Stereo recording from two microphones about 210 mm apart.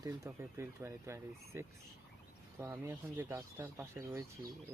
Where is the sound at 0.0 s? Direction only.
15° right (ahead or behind).